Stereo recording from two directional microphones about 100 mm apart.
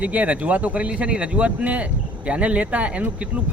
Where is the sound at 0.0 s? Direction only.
15° right (ahead or behind).